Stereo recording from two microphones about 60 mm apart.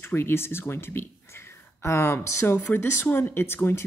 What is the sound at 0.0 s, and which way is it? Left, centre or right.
Speech, left.